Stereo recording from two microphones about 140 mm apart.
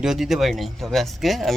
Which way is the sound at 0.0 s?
5° right (ahead or behind).